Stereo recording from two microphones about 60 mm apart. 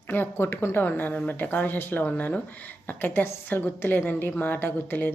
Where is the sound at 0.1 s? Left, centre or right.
Left.